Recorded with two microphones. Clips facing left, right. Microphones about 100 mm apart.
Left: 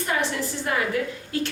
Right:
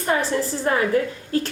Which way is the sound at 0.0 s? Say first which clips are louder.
Right 4 dB; 35° right (ahead or behind).